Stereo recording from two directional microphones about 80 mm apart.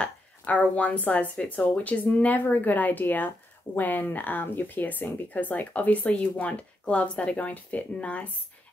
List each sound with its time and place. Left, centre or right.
0.0 s speech: centre